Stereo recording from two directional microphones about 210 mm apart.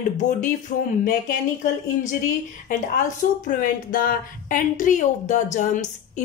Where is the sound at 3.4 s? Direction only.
40° left (ahead or behind).